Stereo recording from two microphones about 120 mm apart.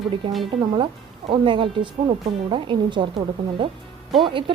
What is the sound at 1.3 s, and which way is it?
A woman's voice, 45° right (ahead or behind).